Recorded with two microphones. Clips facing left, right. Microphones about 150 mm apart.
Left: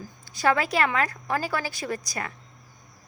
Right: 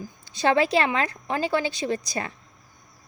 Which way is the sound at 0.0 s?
25° right (ahead or behind).